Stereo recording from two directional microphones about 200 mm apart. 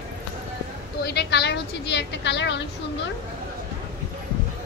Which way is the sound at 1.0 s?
55° left (ahead or behind).